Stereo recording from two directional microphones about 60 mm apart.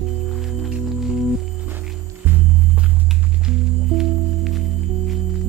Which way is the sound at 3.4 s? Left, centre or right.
Centre.